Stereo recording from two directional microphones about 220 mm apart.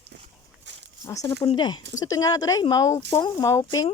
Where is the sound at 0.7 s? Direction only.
55° right (ahead or behind).